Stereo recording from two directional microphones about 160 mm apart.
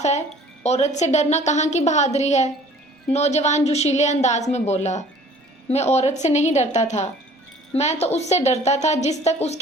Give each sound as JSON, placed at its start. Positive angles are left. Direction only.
{"t": 0.6, "sound": "a woman's voice", "side_deg": 45}